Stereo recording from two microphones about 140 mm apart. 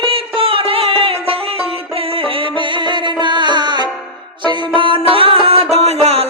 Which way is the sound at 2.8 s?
35° right (ahead or behind).